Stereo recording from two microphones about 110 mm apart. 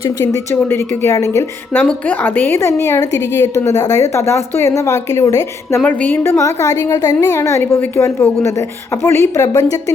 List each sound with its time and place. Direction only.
0.5 s a woman's voice: 20° left (ahead or behind)
1.7 s a woman's voice: 15° left (ahead or behind); by 5.8 s 30° left (ahead or behind)
5.8 s a woman's voice: 15° left (ahead or behind); by 9.6 s 30° left (ahead or behind)